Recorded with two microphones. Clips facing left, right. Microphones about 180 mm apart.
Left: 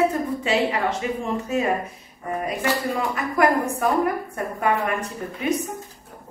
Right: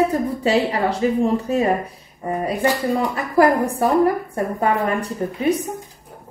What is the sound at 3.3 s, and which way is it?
Speech, 30° right (ahead or behind).